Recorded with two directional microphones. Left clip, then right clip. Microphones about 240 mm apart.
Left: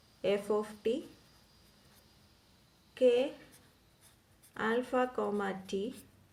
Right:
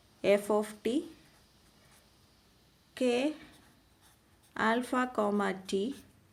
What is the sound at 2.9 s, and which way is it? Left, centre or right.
Speech, right.